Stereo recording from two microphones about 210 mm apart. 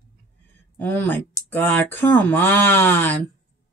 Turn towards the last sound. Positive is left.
turn(degrees=10)  # may be behind; listen again after turning